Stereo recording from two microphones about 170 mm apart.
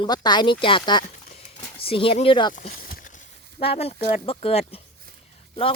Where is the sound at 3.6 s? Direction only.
35° left (ahead or behind).